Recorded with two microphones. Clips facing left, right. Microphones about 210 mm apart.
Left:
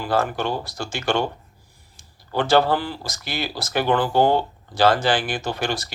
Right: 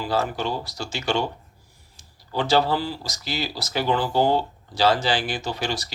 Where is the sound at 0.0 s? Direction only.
55° left (ahead or behind).